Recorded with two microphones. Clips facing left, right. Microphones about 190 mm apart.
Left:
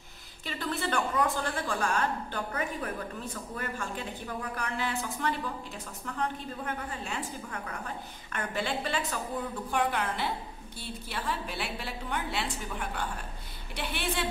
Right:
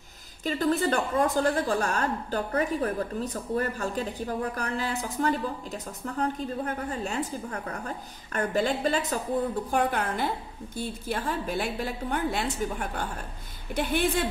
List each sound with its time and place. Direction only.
0.5 s a woman's voice: 40° right (ahead or behind)